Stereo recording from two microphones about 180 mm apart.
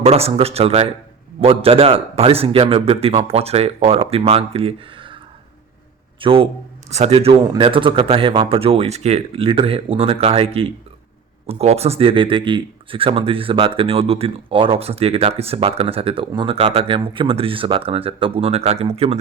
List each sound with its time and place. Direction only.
0.0 s speech: 35° right (ahead or behind)
6.1 s a man's voice: 30° right (ahead or behind)